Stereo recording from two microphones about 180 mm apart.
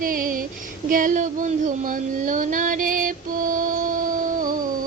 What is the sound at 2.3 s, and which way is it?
Music, 45° right (ahead or behind).